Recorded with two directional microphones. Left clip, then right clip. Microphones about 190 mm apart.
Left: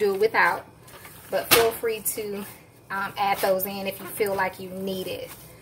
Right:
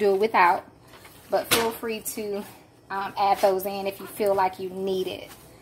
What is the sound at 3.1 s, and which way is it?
A woman's voice, 25° right (ahead or behind).